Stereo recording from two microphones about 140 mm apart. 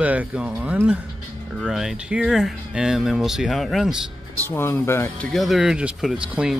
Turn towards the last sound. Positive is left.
turn(degrees=-5)  # may be behind; listen again after turning